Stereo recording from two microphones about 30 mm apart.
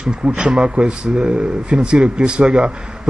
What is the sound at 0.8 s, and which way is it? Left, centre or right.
Speech, right.